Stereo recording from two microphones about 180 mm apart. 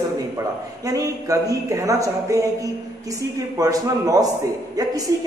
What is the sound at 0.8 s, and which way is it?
Speech, 20° right (ahead or behind).